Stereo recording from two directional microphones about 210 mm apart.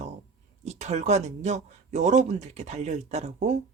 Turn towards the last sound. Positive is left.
turn(degrees=-30)  # may be behind; listen again after turning